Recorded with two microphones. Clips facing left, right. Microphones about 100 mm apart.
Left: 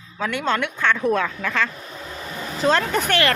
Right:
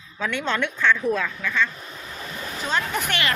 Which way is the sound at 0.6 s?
55° left (ahead or behind).